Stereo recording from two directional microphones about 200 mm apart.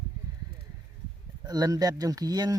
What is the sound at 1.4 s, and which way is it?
Speech, 20° right (ahead or behind).